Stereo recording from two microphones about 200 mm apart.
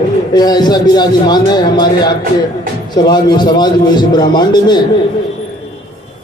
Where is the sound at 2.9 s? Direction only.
20° left (ahead or behind).